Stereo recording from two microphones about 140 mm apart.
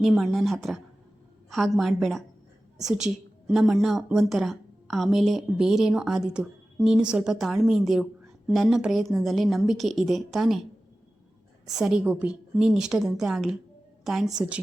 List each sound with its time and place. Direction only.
0.0 s a woman's voice: centre (ahead or behind)
11.7 s a woman's voice: 5° right (ahead or behind)